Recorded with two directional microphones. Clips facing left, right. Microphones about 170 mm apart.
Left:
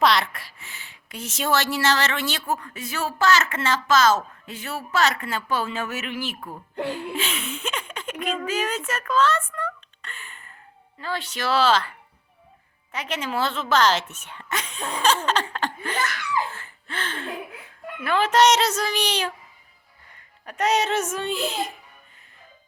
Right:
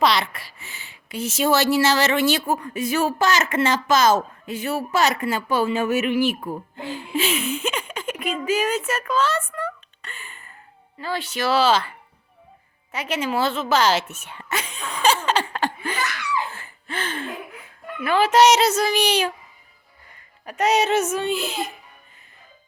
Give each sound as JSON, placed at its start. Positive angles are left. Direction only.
{"t": 0.0, "sound": "speech", "side_deg": 0}
{"t": 6.7, "sound": "speech", "side_deg": 65}
{"t": 7.2, "sound": "a sound", "side_deg": -5}
{"t": 11.0, "sound": "speech", "side_deg": -5}
{"t": 14.8, "sound": "a sound", "side_deg": 30}
{"t": 15.0, "sound": "a sound", "side_deg": -10}
{"t": 16.0, "sound": "laughter", "side_deg": 45}
{"t": 16.6, "sound": "gasp", "side_deg": -10}
{"t": 18.0, "sound": "speech", "side_deg": -5}
{"t": 20.4, "sound": "speech", "side_deg": -10}